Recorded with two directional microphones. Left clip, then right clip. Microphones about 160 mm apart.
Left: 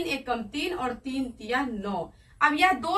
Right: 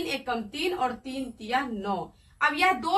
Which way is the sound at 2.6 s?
20° left (ahead or behind).